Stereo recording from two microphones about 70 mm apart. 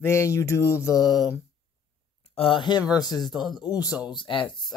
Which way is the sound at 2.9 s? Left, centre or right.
Left.